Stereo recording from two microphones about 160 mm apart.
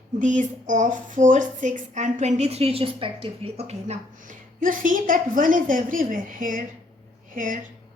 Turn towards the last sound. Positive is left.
turn(degrees=-55)  # may be behind; listen again after turning